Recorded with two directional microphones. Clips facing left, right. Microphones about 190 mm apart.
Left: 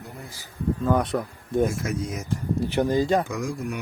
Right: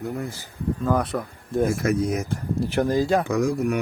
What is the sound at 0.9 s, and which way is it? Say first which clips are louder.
Speech: even; centre (ahead or behind).